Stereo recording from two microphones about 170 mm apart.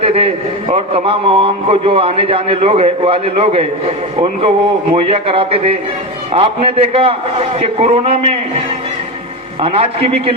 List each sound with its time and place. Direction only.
0.0 s a man's voice: 35° right (ahead or behind)
9.6 s a man's voice: 35° right (ahead or behind)